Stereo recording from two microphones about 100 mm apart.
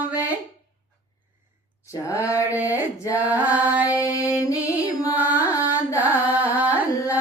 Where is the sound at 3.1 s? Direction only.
15° right (ahead or behind).